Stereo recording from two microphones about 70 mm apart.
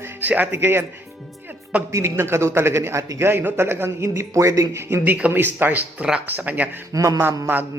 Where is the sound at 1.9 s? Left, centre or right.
Right.